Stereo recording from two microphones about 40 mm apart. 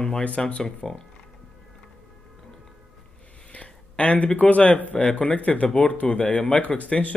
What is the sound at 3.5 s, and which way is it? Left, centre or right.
Speech, left.